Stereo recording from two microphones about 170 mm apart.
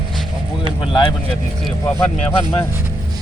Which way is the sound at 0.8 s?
30° left (ahead or behind).